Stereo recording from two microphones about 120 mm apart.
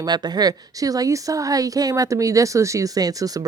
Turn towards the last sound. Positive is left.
turn(degrees=-30)  # may be behind; listen again after turning